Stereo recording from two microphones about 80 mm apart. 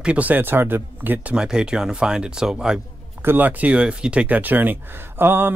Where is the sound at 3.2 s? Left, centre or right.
Right.